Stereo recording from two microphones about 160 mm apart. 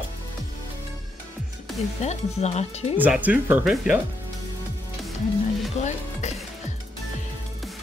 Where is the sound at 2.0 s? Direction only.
45° left (ahead or behind).